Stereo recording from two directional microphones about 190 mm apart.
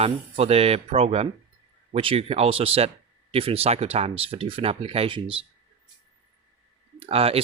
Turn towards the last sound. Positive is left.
turn(degrees=-30)  # may be behind; listen again after turning